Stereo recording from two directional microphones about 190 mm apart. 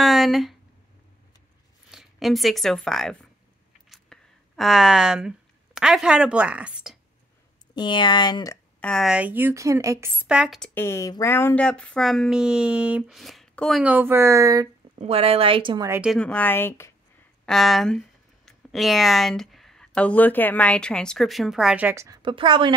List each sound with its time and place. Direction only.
0.0 s a sound: centre (ahead or behind)
1.9 s speech: centre (ahead or behind)
3.9 s a sound: centre (ahead or behind)
5.8 s speech: 5° right (ahead or behind)
7.7 s speech: 25° left (ahead or behind)
8.8 s a woman's voice: centre (ahead or behind)
10.7 s speech: 15° left (ahead or behind); by 14.7 s 15° right (ahead or behind)
15.0 s a woman's voice: 30° right (ahead or behind)
15.9 s speech: 5° right (ahead or behind)
16.2 s speech: 5° left (ahead or behind)
17.5 s speech: centre (ahead or behind); by 22.8 s 25° right (ahead or behind)